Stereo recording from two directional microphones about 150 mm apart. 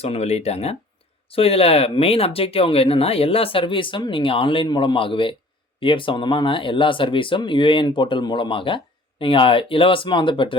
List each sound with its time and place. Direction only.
0.0 s speech: 45° left (ahead or behind)